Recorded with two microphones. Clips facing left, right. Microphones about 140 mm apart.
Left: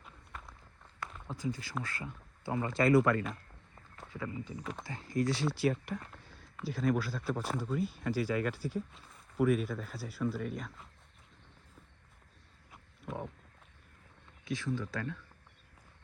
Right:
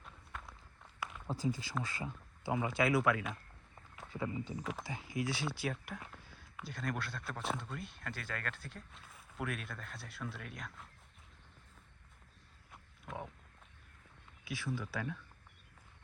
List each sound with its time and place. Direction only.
0.0 s run: centre (ahead or behind)
0.9 s a sound: 5° right (ahead or behind)
1.3 s speech: 25° right (ahead or behind)
2.4 s speech: 10° right (ahead or behind)
4.6 s speech: 5° right (ahead or behind)
12.7 s wild animals: centre (ahead or behind)
14.4 s speech: 10° right (ahead or behind)